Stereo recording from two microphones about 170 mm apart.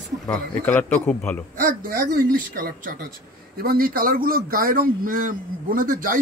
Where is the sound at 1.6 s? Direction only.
55° right (ahead or behind).